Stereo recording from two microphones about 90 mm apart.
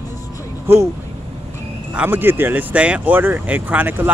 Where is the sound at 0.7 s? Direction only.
25° right (ahead or behind).